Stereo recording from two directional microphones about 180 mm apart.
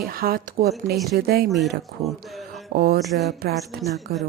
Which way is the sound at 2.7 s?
60° right (ahead or behind).